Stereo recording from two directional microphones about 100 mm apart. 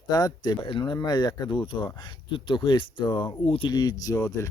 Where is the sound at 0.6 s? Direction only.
55° left (ahead or behind).